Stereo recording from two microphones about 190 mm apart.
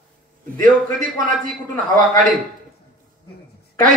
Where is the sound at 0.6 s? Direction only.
45° right (ahead or behind).